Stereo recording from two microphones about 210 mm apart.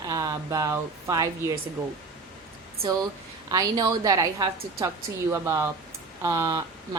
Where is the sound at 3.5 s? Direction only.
15° right (ahead or behind).